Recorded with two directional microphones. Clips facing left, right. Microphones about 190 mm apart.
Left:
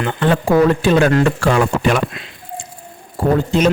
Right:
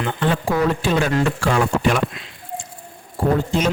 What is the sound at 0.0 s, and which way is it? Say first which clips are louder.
Speech: left 4 dB; 65° left (ahead or behind).